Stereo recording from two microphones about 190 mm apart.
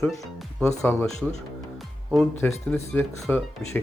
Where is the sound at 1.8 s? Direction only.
Centre (ahead or behind).